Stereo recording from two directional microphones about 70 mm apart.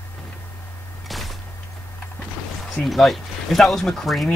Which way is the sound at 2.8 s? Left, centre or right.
Centre.